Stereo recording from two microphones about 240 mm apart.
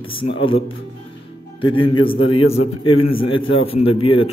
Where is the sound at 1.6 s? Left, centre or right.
Left.